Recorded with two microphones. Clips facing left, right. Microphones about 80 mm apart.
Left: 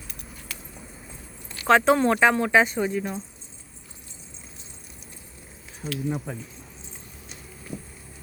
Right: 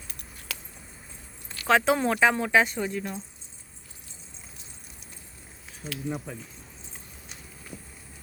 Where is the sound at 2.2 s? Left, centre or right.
Centre.